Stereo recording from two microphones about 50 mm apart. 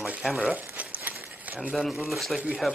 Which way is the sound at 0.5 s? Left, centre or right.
Right.